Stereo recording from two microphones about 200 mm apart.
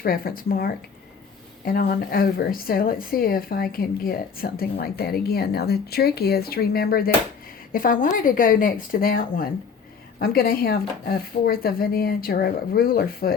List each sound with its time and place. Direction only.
0.0 s a woman's voice: 45° left (ahead or behind)